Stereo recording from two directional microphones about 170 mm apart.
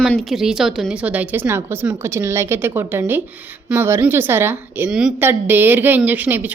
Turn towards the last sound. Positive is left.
turn(degrees=-10)  # may be behind; listen again after turning